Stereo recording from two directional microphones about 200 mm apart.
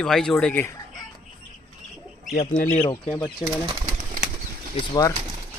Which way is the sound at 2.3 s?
40° left (ahead or behind).